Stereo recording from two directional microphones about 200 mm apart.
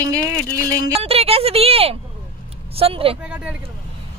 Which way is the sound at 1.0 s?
30° right (ahead or behind).